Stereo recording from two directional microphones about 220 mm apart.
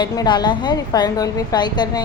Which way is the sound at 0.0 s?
20° left (ahead or behind).